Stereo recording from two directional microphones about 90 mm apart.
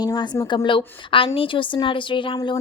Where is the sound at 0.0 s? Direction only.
50° left (ahead or behind).